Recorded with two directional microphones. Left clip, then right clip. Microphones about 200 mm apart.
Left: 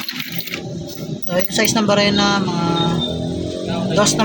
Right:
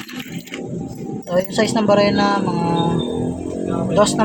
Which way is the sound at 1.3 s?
20° right (ahead or behind).